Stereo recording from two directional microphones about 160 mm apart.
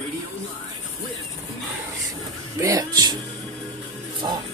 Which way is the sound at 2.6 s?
20° right (ahead or behind).